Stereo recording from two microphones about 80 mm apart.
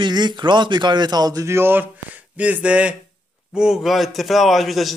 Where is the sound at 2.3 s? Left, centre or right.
Centre.